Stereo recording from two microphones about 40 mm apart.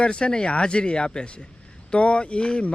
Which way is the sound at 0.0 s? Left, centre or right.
Left.